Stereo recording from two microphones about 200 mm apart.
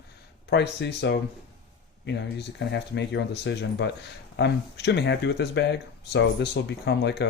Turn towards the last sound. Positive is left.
turn(degrees=60)  # may be behind; listen again after turning